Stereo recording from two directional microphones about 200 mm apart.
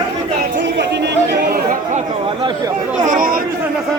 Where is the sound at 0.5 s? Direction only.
60° right (ahead or behind); by 2.0 s 40° right (ahead or behind).